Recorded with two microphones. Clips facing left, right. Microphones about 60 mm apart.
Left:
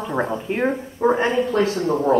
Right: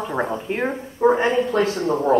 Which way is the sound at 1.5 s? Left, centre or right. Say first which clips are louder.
Even; right.